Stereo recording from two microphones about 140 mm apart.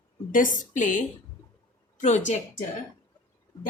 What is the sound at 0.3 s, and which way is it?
Speech, 70° left (ahead or behind).